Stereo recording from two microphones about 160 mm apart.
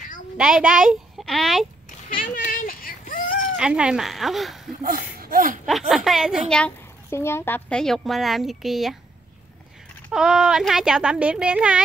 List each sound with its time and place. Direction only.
0.4 s speech: 5° right (ahead or behind)
2.1 s a sound: 60° left (ahead or behind)
3.5 s a woman's voice: 5° right (ahead or behind)
5.2 s a sound: 60° right (ahead or behind)
5.7 s a woman's voice: centre (ahead or behind)
6.5 s a woman's voice: 10° left (ahead or behind)
10.1 s a woman's voice: 5° right (ahead or behind)